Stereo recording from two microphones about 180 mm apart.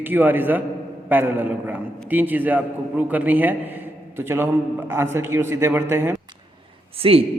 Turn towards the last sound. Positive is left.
turn(degrees=-30)  # may be behind; listen again after turning